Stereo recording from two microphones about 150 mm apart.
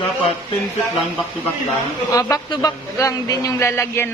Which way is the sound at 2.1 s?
25° left (ahead or behind).